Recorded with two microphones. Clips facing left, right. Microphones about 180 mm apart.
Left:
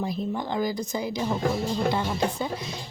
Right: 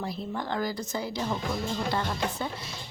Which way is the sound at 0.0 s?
15° left (ahead or behind).